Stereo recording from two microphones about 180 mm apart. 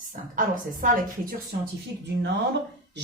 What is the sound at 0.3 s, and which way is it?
Speech, 50° right (ahead or behind).